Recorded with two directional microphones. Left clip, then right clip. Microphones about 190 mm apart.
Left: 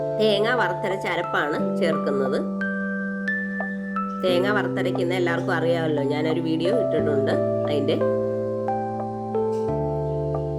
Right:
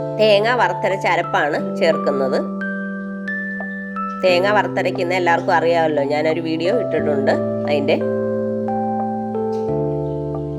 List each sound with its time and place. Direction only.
0.2 s speech: 15° left (ahead or behind)
4.2 s speech: 15° left (ahead or behind)